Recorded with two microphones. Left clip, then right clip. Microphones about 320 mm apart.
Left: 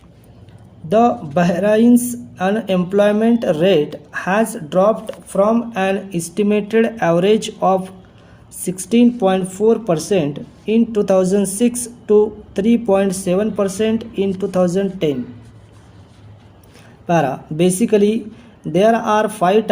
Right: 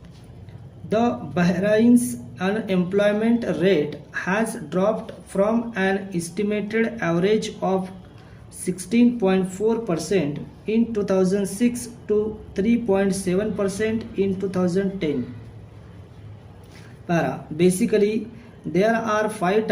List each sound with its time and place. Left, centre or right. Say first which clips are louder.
0.9 s speech: left 8 dB; left
17.1 s speech: left 7 dB; left